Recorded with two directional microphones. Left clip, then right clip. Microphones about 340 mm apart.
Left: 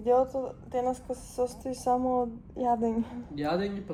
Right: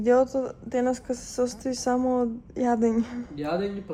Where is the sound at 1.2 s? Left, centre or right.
Right.